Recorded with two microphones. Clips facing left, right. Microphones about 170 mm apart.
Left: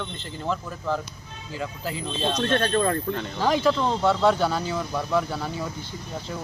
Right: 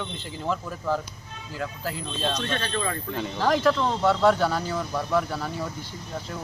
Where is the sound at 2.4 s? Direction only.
50° left (ahead or behind).